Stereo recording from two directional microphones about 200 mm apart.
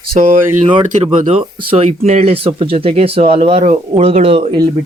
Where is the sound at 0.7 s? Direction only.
35° right (ahead or behind).